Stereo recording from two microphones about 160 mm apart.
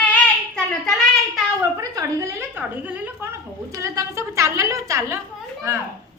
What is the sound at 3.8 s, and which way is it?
A woman's voice, 20° right (ahead or behind).